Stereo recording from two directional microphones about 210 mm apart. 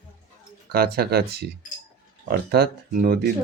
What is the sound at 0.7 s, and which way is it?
Speech, 45° right (ahead or behind).